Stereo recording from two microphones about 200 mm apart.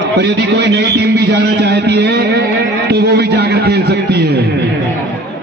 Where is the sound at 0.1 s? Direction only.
60° right (ahead or behind).